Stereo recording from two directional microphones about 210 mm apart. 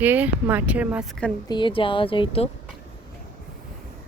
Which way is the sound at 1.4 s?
20° left (ahead or behind).